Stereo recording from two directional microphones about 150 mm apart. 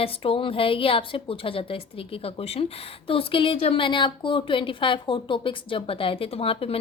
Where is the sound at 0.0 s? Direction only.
40° left (ahead or behind).